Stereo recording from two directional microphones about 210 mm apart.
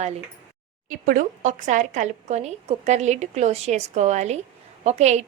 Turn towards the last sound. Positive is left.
turn(degrees=-30)  # may be behind; listen again after turning